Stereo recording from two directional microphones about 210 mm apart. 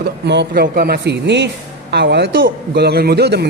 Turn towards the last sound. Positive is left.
turn(degrees=-50)  # may be behind; listen again after turning